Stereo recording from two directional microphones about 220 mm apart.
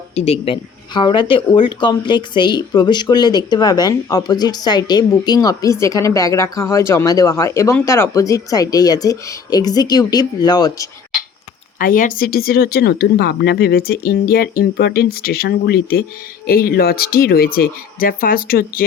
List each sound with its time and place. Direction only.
0.1 s speech: 30° left (ahead or behind)
11.8 s speech: 40° left (ahead or behind)